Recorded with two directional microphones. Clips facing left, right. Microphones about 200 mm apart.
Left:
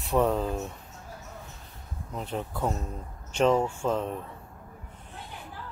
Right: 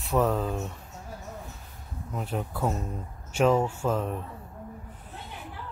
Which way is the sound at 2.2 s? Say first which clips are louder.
Right 1 dB; 5° right (ahead or behind).